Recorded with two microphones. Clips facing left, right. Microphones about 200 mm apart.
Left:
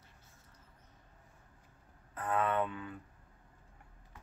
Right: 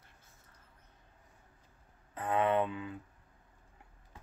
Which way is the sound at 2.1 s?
25° right (ahead or behind).